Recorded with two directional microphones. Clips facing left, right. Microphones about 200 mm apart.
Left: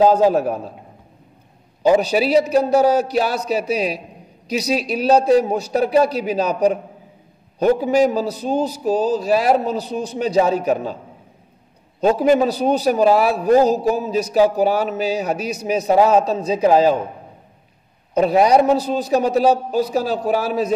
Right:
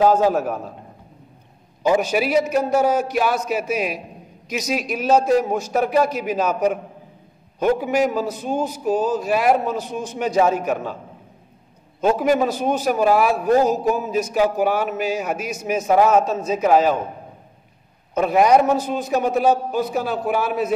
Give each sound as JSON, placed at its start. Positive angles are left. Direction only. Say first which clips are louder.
{"t": 0.0, "sound": "a man's voice", "louder": "left 3 dB", "side_deg": 30}
{"t": 1.8, "sound": "a man's voice", "louder": "left 3 dB", "side_deg": 35}
{"t": 7.5, "sound": "a man's voice", "louder": "left 3 dB", "side_deg": 35}
{"t": 12.2, "sound": "a man's voice", "louder": "left 3 dB", "side_deg": 35}
{"t": 18.2, "sound": "a man's voice", "louder": "left 1 dB", "side_deg": 35}